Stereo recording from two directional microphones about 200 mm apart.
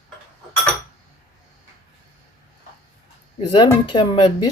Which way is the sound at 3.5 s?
20° left (ahead or behind).